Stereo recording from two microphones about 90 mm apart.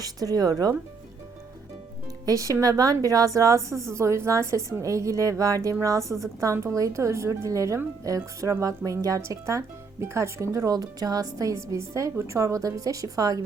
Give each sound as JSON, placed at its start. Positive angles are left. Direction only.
{"t": 0.0, "sound": "speech", "side_deg": -45}
{"t": 2.2, "sound": "speech", "side_deg": -40}